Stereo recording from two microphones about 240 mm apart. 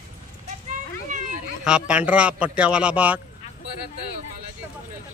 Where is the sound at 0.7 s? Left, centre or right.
Right.